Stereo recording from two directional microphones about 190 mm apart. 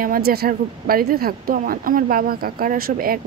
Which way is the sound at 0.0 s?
50° right (ahead or behind).